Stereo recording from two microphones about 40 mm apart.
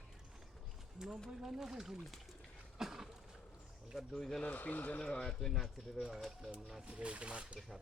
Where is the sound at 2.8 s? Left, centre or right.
Centre.